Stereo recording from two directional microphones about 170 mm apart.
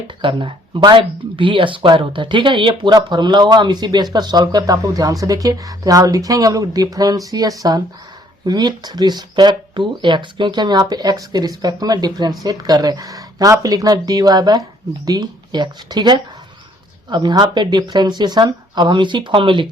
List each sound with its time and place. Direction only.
0.2 s speech: 30° right (ahead or behind)